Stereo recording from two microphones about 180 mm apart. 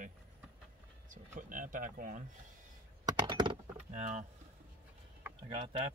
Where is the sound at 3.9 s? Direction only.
40° right (ahead or behind).